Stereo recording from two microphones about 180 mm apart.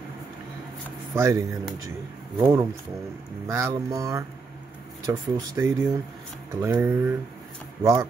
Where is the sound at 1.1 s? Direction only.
15° right (ahead or behind).